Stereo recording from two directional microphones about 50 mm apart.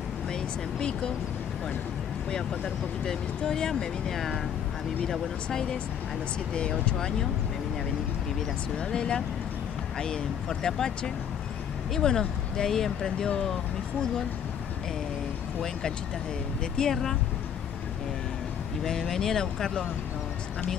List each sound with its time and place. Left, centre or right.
0.3 s speech: centre
2.3 s speech: centre
7.0 s speech: centre
8.7 s speech: centre
16.7 s speech: centre
18.8 s speech: centre